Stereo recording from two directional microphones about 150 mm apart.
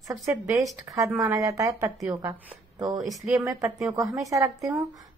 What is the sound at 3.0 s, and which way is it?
Speech, centre (ahead or behind).